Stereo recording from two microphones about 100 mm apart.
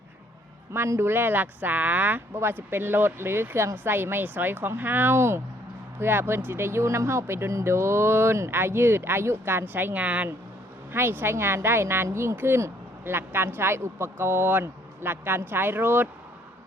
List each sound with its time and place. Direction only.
0.7 s a woman's voice: 25° right (ahead or behind)